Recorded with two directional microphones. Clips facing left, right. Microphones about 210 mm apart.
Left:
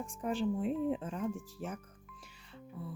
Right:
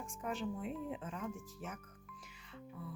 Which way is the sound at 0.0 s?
35° left (ahead or behind).